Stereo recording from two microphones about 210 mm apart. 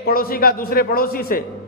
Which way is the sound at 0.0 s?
45° left (ahead or behind).